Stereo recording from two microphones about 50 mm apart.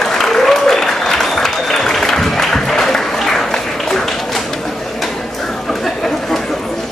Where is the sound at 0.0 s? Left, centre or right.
Centre.